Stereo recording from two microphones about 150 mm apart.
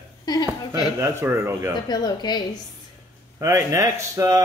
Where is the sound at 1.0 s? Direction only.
15° right (ahead or behind).